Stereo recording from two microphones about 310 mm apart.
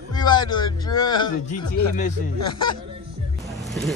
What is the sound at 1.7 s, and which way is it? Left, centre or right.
Speech, left.